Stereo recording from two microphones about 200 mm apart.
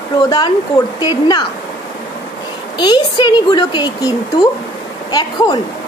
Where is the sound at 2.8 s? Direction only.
20° left (ahead or behind).